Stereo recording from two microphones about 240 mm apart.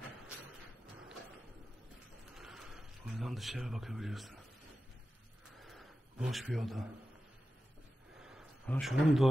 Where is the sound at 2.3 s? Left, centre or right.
Centre.